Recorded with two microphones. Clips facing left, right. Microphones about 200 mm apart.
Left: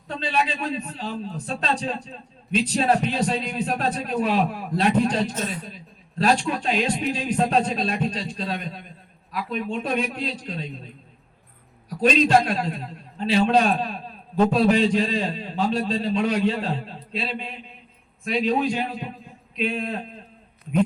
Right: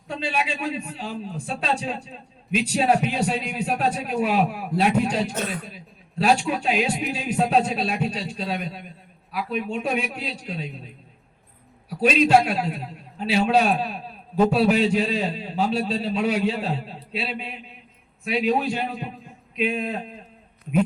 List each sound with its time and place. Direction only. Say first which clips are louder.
0.1 s a man's voice: left 1 dB; 10° right (ahead or behind)
5.3 s a man's voice: right 1 dB; 60° right (ahead or behind)
5.6 s a man's voice: left 1 dB; 10° right (ahead or behind)